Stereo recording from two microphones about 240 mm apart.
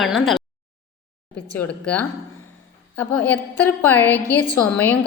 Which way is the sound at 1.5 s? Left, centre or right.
Centre.